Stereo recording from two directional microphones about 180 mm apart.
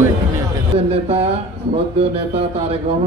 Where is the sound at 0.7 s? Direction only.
35° right (ahead or behind).